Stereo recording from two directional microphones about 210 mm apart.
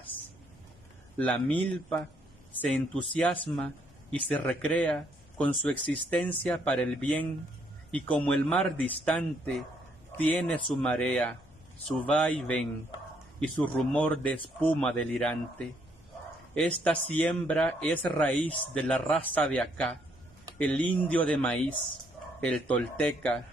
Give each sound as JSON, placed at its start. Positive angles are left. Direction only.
{"t": 1.1, "sound": "speech", "side_deg": 5}
{"t": 3.2, "sound": "speech", "side_deg": 5}